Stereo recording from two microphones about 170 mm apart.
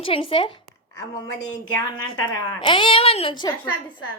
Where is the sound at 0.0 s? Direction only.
30° left (ahead or behind).